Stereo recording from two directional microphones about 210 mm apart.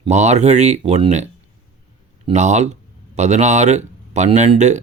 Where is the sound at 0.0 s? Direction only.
35° right (ahead or behind).